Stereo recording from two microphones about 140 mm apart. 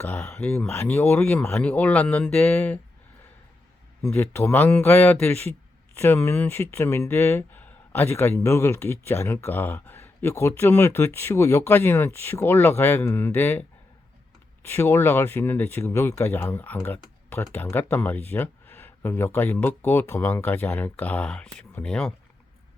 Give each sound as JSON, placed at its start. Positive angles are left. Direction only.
{"t": 0.0, "sound": "speech", "side_deg": 10}
{"t": 4.1, "sound": "speech", "side_deg": 15}